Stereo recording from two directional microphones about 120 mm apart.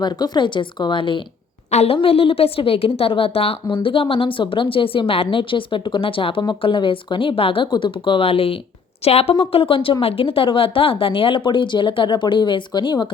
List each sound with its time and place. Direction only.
0.0 s speech: 35° left (ahead or behind)
1.7 s a woman's voice: 60° left (ahead or behind); by 13.1 s 40° left (ahead or behind)